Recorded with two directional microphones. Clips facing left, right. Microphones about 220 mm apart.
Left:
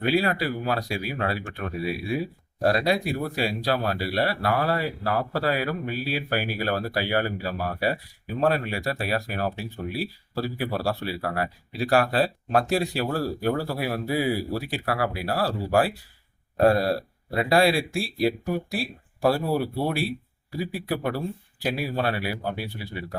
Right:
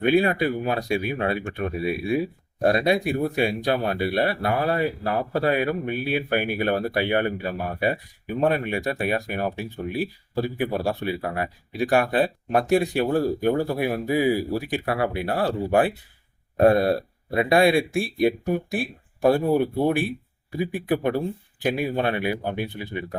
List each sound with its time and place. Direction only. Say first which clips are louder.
0.0 s speech: right 4 dB; 20° right (ahead or behind)